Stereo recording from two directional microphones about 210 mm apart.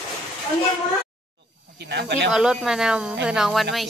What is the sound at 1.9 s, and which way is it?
Speech, 55° right (ahead or behind).